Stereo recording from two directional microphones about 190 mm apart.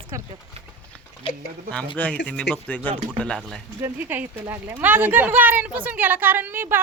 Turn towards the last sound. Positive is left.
turn(degrees=-10)  # may be behind; listen again after turning